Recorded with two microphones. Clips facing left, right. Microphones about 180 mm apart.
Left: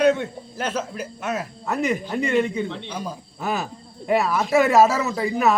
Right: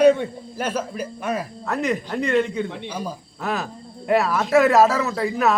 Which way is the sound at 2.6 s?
10° right (ahead or behind).